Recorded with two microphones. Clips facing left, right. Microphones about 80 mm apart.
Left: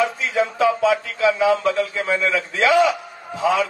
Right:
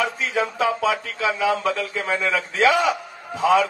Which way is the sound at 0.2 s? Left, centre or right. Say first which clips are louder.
Left 3 dB; right.